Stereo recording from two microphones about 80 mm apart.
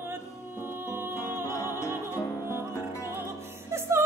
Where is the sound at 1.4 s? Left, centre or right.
Left.